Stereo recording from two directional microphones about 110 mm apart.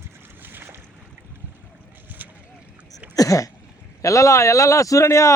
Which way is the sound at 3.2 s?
30° left (ahead or behind).